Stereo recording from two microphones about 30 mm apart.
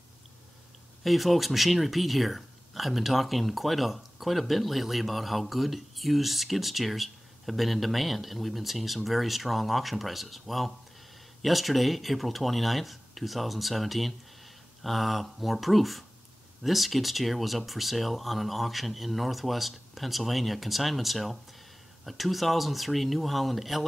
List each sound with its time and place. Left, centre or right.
1.0 s speech: centre